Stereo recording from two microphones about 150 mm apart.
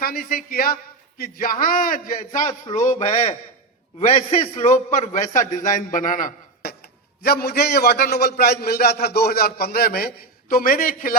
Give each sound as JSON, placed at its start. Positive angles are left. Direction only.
{"t": 0.0, "sound": "a man's voice", "side_deg": 80}
{"t": 2.7, "sound": "a man's voice", "side_deg": 50}
{"t": 7.2, "sound": "a man's voice", "side_deg": 90}
{"t": 10.5, "sound": "a man's voice", "side_deg": 70}